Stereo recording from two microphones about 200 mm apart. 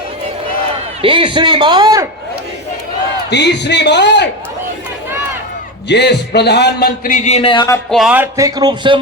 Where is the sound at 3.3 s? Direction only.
60° left (ahead or behind).